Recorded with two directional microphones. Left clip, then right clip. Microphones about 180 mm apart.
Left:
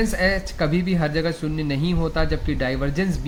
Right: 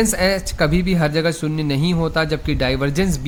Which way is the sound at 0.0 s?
45° right (ahead or behind).